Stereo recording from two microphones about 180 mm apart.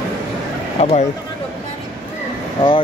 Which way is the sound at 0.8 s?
35° left (ahead or behind).